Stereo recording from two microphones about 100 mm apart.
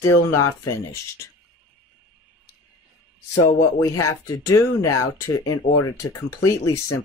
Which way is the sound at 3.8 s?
30° left (ahead or behind).